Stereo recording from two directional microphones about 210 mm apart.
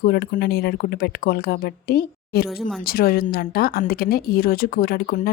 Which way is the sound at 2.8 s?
45° left (ahead or behind).